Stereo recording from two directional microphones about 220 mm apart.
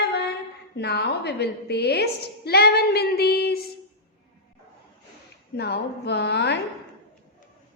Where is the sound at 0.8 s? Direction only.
50° left (ahead or behind).